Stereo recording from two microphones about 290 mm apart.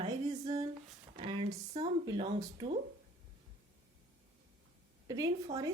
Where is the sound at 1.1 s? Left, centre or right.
Centre.